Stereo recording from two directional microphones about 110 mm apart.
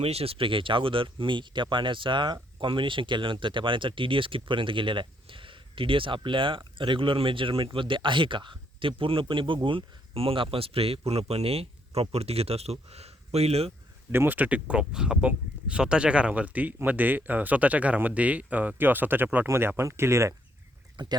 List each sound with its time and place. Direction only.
0.0 s speech: 65° right (ahead or behind)
14.1 s speech: 20° right (ahead or behind)
20.9 s speech: 40° right (ahead or behind)